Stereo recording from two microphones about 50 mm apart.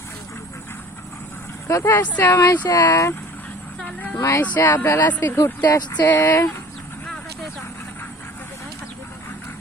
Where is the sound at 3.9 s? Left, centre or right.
Left.